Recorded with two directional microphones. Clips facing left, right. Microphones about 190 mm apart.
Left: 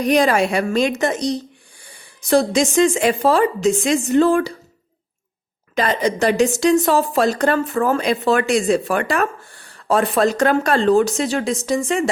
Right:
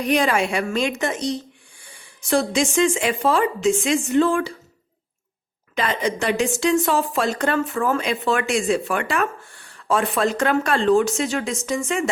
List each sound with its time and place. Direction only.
0.0 s a woman's voice: 40° left (ahead or behind)
5.7 s a woman's voice: 40° left (ahead or behind)